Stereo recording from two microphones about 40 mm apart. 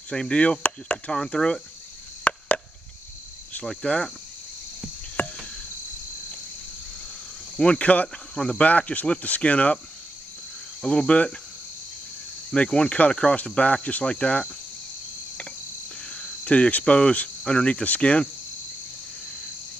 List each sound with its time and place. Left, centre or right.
0.1 s speech: left
1.1 s cricket: left
2.2 s chop: left
3.8 s cricket: left
5.2 s cricket: left
7.5 s speech: left
8.4 s cricket: left
8.6 s speech: left
10.8 s cricket: left
12.4 s cricket: left
13.5 s speech: left
16.1 s speech: left
17.5 s cricket: left
17.8 s speech: left